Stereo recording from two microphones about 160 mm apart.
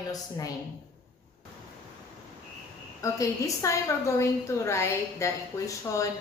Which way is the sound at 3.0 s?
20° left (ahead or behind).